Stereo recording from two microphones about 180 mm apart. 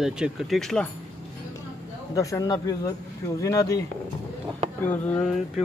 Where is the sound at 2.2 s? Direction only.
20° left (ahead or behind).